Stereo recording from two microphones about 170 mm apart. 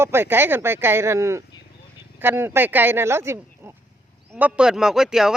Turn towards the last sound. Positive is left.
turn(degrees=-5)  # may be behind; listen again after turning